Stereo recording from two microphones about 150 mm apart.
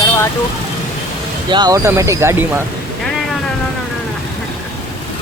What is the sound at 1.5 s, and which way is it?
Speech, 30° right (ahead or behind).